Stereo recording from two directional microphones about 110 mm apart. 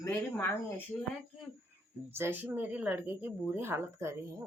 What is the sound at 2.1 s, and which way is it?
A woman's voice, 20° right (ahead or behind).